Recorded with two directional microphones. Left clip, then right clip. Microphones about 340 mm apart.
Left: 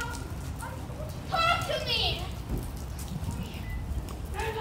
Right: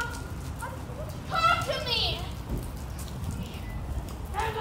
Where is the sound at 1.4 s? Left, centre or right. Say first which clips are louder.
Right 2 dB; centre.